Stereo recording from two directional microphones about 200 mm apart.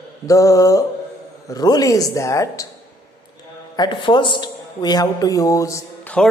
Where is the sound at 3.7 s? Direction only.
25° left (ahead or behind).